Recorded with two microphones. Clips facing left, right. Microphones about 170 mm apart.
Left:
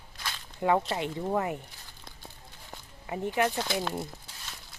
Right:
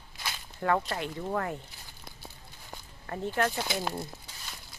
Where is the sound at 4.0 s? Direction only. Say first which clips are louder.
Left 1 dB; centre (ahead or behind).